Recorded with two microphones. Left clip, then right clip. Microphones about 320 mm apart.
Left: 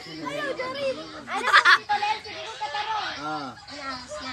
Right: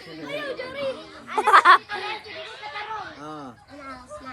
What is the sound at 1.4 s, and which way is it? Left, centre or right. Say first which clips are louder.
Speech: right 3 dB; centre.